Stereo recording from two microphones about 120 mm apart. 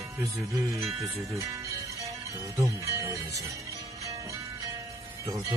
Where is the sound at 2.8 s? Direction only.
25° right (ahead or behind).